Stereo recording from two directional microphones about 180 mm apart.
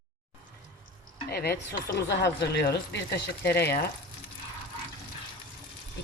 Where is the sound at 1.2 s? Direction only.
60° left (ahead or behind).